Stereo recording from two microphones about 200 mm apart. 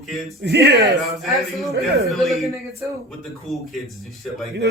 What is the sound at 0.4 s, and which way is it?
Speech, 55° right (ahead or behind).